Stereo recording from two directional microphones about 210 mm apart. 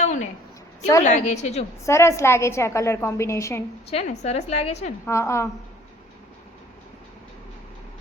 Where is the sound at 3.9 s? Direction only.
30° left (ahead or behind).